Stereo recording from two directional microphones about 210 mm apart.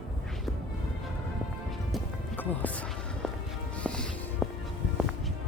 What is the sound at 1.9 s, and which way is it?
Music, 5° left (ahead or behind).